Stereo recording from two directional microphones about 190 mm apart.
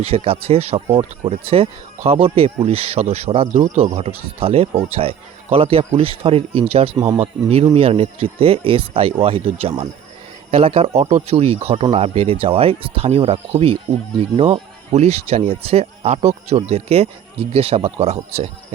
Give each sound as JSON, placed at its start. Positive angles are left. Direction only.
{"t": 0.0, "sound": "speech", "side_deg": -30}
{"t": 6.9, "sound": "speech", "side_deg": -20}
{"t": 7.2, "sound": "speech", "side_deg": -35}